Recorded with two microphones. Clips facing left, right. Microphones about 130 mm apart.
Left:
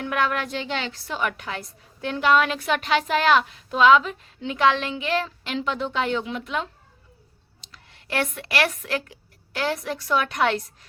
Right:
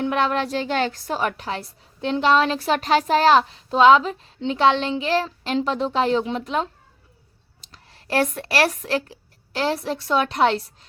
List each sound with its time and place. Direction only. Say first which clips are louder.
0.0 s a woman's voice: right 3 dB; 25° right (ahead or behind)